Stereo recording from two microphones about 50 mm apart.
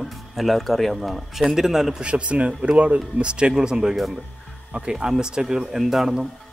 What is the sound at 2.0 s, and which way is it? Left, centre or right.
A man's voice, right.